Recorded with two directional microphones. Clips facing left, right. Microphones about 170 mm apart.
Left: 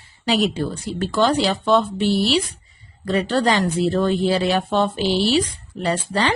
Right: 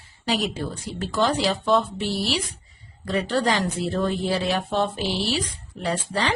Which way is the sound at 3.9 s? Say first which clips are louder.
Left 3 dB; 85° left.